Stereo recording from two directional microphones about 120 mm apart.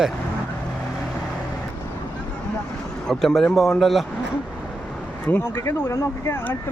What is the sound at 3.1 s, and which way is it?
Speech, 5° left (ahead or behind).